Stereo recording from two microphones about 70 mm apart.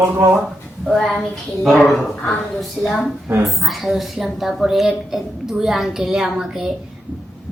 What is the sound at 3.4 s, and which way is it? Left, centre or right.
A woman's voice, centre.